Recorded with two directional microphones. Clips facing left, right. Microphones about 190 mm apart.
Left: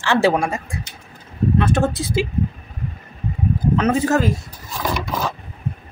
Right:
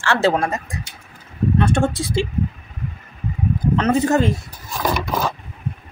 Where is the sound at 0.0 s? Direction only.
15° left (ahead or behind).